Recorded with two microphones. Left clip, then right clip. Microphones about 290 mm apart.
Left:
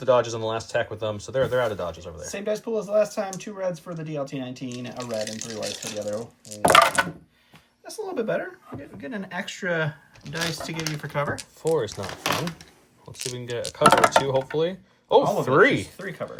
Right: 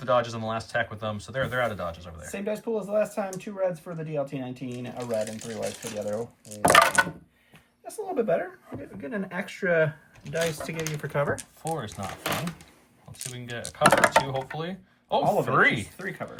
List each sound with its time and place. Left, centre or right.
0.0 s speech: centre
11.8 s speech: left
13.1 s speech: centre
14.6 s speech: left
16.0 s speech: centre